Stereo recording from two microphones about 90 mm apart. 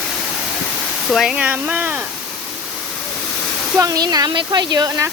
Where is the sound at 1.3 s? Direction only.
15° right (ahead or behind).